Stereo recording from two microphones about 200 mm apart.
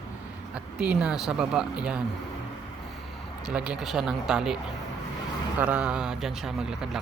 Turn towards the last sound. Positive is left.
turn(degrees=-5)  # may be behind; listen again after turning